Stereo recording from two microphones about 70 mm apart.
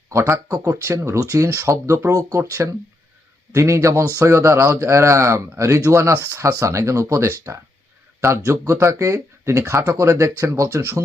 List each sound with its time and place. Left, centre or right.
0.1 s speech: right
0.4 s speech: right
3.5 s speech: right